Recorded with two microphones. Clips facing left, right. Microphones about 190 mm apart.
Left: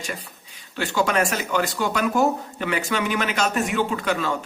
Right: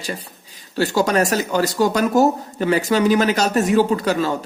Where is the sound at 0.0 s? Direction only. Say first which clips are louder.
Right 4 dB; 35° right (ahead or behind).